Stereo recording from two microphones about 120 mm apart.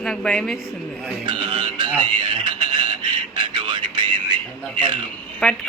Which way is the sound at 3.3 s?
40° right (ahead or behind).